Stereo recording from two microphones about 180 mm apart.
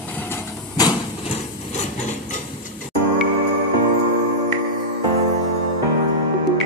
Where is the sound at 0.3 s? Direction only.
20° left (ahead or behind).